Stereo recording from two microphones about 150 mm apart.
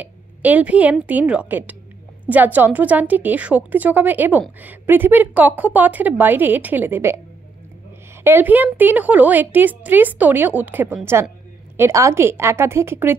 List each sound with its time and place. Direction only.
0.0 s a woman's voice: 10° right (ahead or behind)
8.2 s a woman's voice: 15° right (ahead or behind)